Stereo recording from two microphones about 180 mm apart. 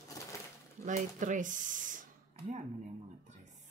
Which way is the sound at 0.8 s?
45° right (ahead or behind).